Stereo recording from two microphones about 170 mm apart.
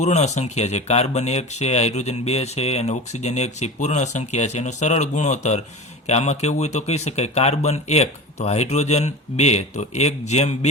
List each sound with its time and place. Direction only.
0.0 s speech: 40° left (ahead or behind)